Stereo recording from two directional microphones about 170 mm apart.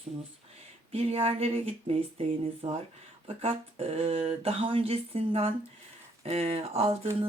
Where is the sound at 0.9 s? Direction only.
35° right (ahead or behind).